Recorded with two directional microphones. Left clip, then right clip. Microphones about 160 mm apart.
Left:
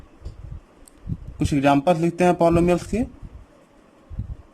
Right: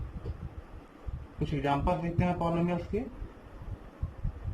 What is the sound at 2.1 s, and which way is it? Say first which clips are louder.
Speech: left 14 dB; 90° left.